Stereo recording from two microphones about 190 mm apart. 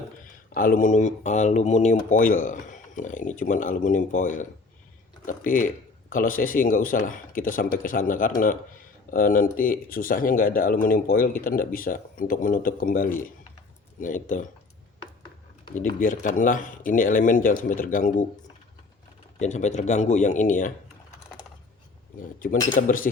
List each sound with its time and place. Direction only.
0.5 s speech: 45° left (ahead or behind)
15.7 s speech: 45° left (ahead or behind)
19.4 s speech: 40° left (ahead or behind)
22.7 s speech: 45° left (ahead or behind)